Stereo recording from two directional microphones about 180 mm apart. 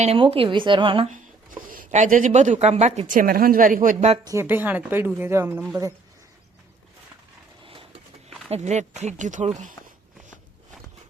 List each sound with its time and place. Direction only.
0.0 s speech: 35° right (ahead or behind)
1.1 s speech: 50° right (ahead or behind)
4.2 s a woman's voice: 15° right (ahead or behind)
7.6 s a sound: 30° right (ahead or behind)
8.4 s speech: 40° right (ahead or behind)